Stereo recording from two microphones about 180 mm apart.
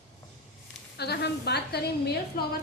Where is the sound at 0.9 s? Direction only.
65° left (ahead or behind).